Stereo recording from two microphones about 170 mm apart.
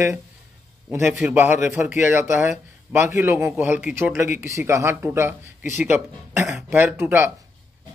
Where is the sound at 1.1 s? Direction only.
5° right (ahead or behind).